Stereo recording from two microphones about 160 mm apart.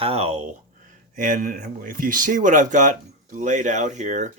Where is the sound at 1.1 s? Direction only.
55° right (ahead or behind).